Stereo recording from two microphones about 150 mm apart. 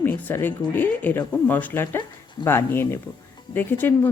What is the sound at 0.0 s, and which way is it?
Speech, 15° left (ahead or behind).